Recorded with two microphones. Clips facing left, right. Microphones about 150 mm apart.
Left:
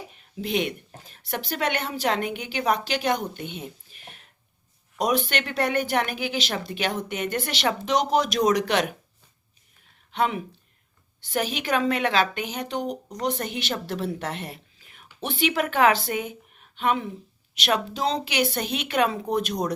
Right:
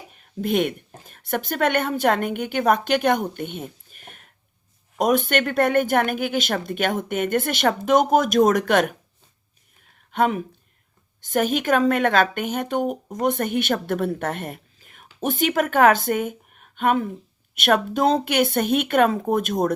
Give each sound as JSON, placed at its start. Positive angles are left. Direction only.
{"t": 0.1, "sound": "speech", "side_deg": -50}
{"t": 10.1, "sound": "a woman's voice", "side_deg": -45}